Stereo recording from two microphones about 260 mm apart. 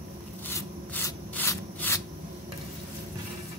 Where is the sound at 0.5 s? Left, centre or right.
Centre.